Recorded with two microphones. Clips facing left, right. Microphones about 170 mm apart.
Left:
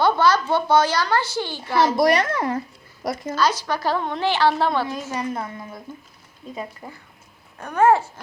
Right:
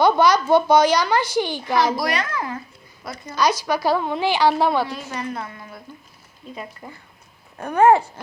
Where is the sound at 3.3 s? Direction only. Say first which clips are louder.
Right 3 dB; 15° right (ahead or behind).